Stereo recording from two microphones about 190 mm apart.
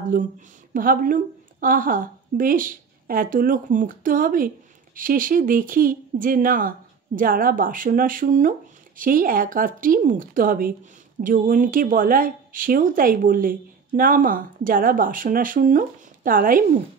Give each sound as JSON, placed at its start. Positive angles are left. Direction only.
{"t": 0.1, "sound": "speech", "side_deg": -45}